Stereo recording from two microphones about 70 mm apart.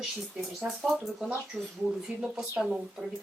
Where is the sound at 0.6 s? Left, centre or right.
Right.